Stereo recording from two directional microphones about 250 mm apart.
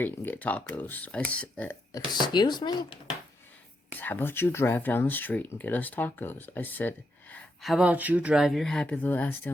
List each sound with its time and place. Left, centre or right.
0.0 s speech: centre
2.1 s speech: centre